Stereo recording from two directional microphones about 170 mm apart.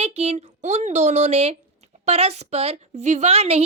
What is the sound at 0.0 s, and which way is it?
A woman's voice, 40° right (ahead or behind).